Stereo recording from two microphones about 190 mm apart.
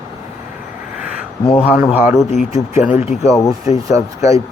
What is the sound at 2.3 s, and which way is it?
Speech, 35° left (ahead or behind).